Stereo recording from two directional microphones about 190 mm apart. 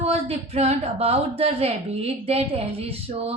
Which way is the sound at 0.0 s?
35° right (ahead or behind).